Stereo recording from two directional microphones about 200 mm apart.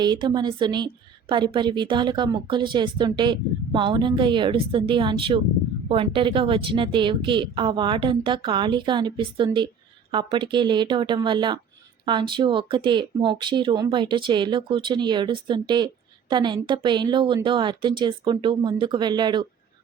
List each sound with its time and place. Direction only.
0.0 s a woman's voice: 20° right (ahead or behind)